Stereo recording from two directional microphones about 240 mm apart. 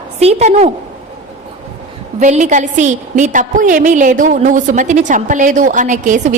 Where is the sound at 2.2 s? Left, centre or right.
Right.